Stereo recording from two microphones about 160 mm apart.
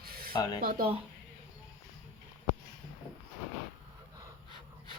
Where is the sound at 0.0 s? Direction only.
70° right (ahead or behind).